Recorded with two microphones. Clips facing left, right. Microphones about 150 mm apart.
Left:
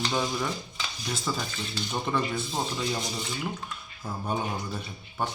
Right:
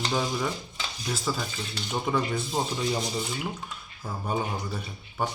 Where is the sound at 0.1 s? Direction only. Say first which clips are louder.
Right 1 dB; 5° right (ahead or behind).